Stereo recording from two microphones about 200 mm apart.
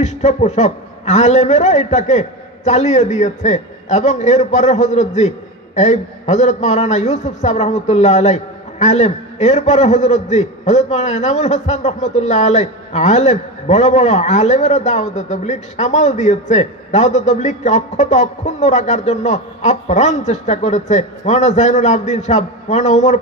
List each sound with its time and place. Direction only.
0.0 s a man's voice: 35° left (ahead or behind)